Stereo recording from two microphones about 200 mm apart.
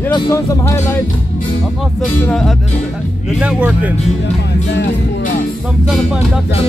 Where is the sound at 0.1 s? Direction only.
15° left (ahead or behind).